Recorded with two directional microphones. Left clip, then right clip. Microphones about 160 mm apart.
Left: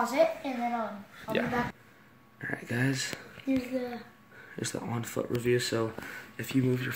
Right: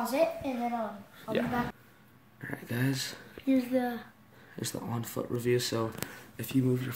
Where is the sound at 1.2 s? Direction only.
Centre (ahead or behind).